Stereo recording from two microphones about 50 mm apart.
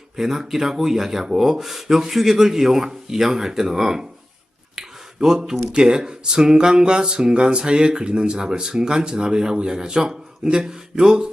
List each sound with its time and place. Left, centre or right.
0.2 s speech: centre
4.7 s a sound: centre
5.7 s speech: centre